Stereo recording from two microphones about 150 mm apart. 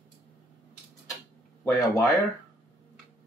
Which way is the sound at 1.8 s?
20° left (ahead or behind).